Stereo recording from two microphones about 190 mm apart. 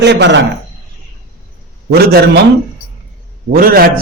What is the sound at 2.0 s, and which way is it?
Speech, 55° right (ahead or behind).